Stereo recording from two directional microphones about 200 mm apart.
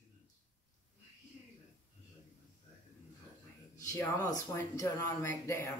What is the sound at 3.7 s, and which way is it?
Speech, 15° left (ahead or behind).